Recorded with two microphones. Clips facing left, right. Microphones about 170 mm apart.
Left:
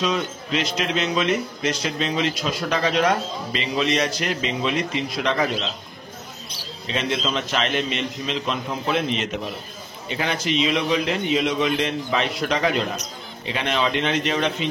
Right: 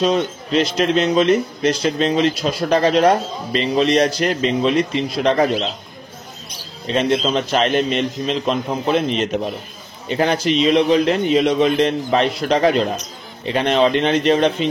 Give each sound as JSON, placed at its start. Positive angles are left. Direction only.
{"t": 0.0, "sound": "speech", "side_deg": -40}
{"t": 6.9, "sound": "speech", "side_deg": -40}